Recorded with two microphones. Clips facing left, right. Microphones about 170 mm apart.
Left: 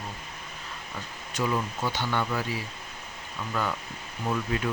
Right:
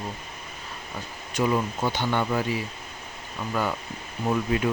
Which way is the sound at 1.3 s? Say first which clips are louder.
Right 4 dB; 25° right (ahead or behind).